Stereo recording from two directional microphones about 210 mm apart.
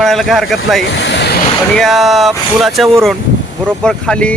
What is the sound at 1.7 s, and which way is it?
Speech, centre (ahead or behind).